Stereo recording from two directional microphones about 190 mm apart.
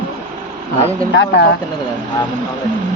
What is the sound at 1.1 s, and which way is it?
Speech, 75° left (ahead or behind).